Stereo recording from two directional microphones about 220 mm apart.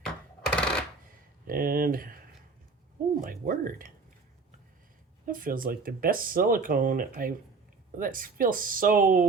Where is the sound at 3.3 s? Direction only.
40° right (ahead or behind).